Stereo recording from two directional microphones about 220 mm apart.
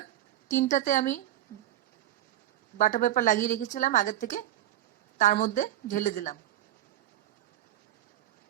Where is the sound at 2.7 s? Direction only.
35° left (ahead or behind).